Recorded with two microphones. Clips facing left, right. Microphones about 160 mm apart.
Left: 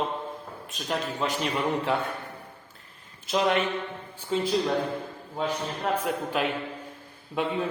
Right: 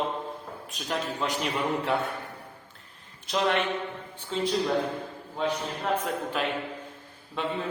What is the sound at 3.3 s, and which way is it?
A man's voice, centre (ahead or behind).